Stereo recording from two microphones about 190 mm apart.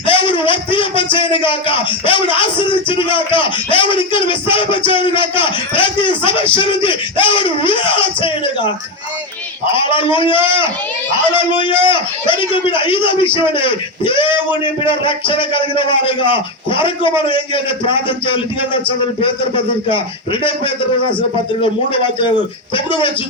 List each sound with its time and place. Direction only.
0.0 s a man's voice: 25° left (ahead or behind)
21.6 s a man's voice: 25° left (ahead or behind)